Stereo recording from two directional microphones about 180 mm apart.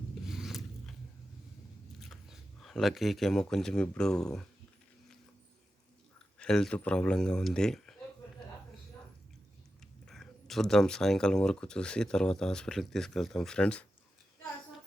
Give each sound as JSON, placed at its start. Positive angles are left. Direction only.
{"t": 0.3, "sound": "zipper", "side_deg": 0}
{"t": 2.0, "sound": "speech", "side_deg": 0}
{"t": 6.4, "sound": "speech", "side_deg": 5}
{"t": 10.1, "sound": "speech", "side_deg": 0}